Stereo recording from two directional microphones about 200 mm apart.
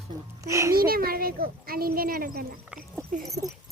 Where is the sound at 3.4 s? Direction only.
15° right (ahead or behind).